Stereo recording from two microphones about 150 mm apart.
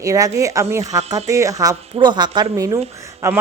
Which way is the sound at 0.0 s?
20° right (ahead or behind).